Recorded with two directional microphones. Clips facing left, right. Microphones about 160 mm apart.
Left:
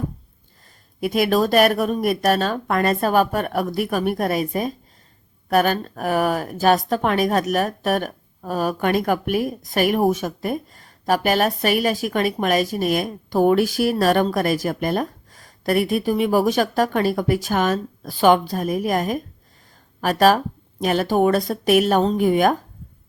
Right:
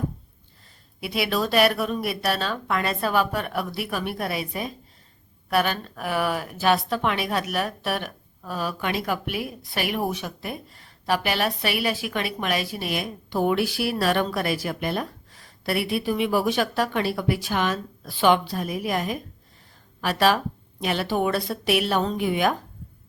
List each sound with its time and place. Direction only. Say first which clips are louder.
0.9 s a woman's voice: left 7 dB; 45° left (ahead or behind)